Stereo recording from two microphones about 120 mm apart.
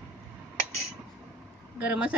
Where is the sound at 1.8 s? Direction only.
10° right (ahead or behind).